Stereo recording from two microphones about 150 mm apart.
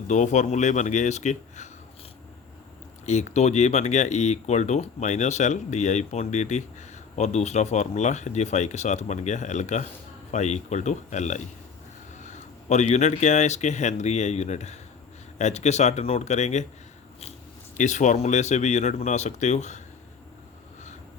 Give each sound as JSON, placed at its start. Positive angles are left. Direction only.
{"t": 0.1, "sound": "speech", "side_deg": 55}
{"t": 3.1, "sound": "speech", "side_deg": 50}
{"t": 17.7, "sound": "speech", "side_deg": 55}